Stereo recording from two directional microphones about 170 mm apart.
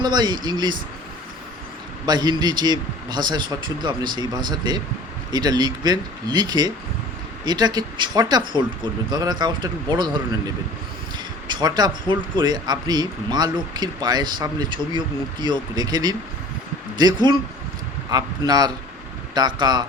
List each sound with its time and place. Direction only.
0.0 s speech: 25° right (ahead or behind)
2.0 s speech: 25° right (ahead or behind)
11.4 s speech: 25° right (ahead or behind)